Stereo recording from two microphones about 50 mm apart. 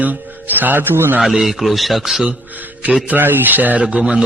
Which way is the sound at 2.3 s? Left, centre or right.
Right.